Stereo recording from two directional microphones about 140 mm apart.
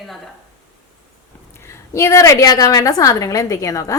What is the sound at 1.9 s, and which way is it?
Speech, 20° left (ahead or behind).